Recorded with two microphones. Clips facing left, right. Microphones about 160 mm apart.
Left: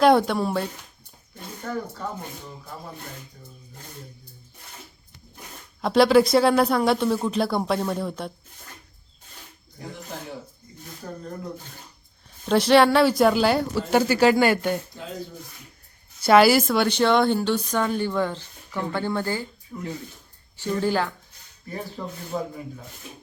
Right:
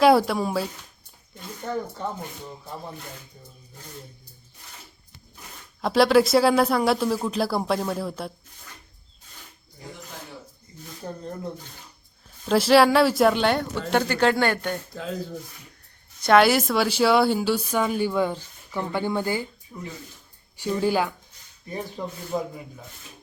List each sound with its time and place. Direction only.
0.0 s speech: centre (ahead or behind)
1.6 s speech: 20° right (ahead or behind)
5.8 s speech: centre (ahead or behind)
11.0 s speech: 25° right (ahead or behind)
12.5 s speech: centre (ahead or behind)
16.2 s a woman's voice: 5° left (ahead or behind); by 22.6 s 15° right (ahead or behind)